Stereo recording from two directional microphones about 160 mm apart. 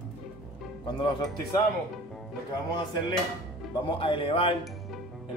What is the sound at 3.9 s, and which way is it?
Speech, 30° left (ahead or behind).